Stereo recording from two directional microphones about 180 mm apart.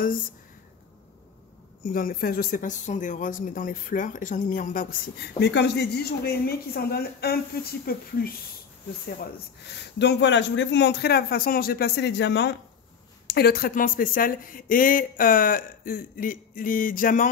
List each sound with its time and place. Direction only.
1.9 s speech: 50° left (ahead or behind)
9.9 s a man's voice: 75° left (ahead or behind)
13.3 s speech: 60° left (ahead or behind)